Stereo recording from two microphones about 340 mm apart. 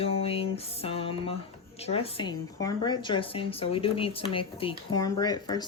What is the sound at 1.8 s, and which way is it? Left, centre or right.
Speech, centre.